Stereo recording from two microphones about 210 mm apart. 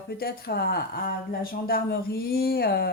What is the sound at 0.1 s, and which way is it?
Speech, 50° left (ahead or behind).